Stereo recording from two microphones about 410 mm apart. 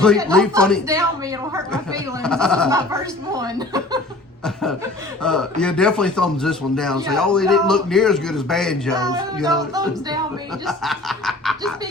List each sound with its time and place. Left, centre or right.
0.0 s speech: centre
5.2 s speech: centre